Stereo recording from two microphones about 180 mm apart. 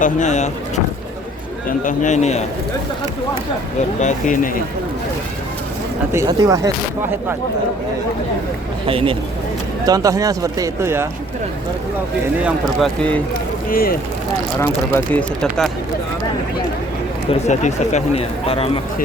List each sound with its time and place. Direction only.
0.0 s speech: 40° left (ahead or behind)
1.8 s speech: 45° left (ahead or behind)
4.0 s speech: 45° left (ahead or behind)
6.1 s speech: 15° right (ahead or behind)
8.9 s speech: 30° right (ahead or behind)
9.8 s speech: 20° right (ahead or behind)
12.5 s speech: 5° left (ahead or behind)
13.7 s speech: 55° left (ahead or behind)
14.6 s speech: 10° left (ahead or behind)
17.4 s speech: 40° left (ahead or behind)